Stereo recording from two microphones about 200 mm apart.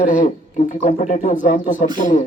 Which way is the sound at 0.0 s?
35° left (ahead or behind).